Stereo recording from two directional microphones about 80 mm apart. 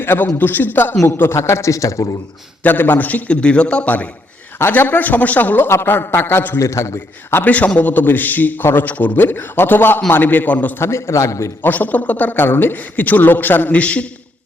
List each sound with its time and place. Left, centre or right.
0.0 s a man's voice: left
2.6 s a man's voice: left
6.6 s a man's voice: left
10.8 s a man's voice: left
11.6 s a man's voice: left